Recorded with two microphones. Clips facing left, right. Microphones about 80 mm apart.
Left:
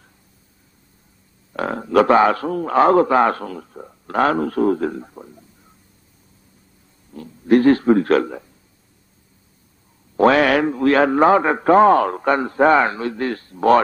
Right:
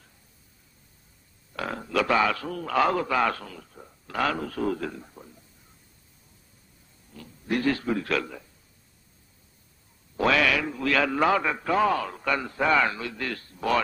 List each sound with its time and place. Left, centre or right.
1.6 s a man's voice: left
7.2 s speech: left
10.1 s a man's voice: left